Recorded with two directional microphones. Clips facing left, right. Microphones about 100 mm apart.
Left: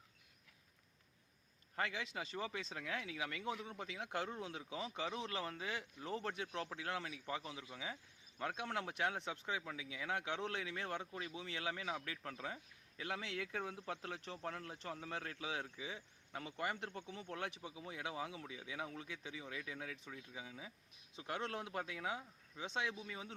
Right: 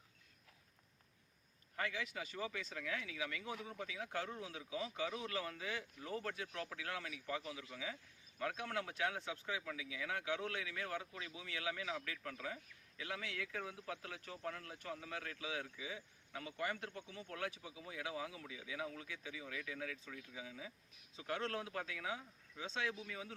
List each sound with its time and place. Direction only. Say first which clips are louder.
1.7 s speech: left 1 dB; 25° left (ahead or behind)